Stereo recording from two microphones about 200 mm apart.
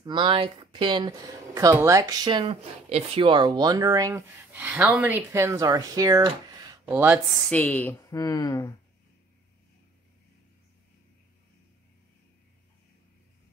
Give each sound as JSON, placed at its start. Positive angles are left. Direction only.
{"t": 0.0, "sound": "speech", "side_deg": -25}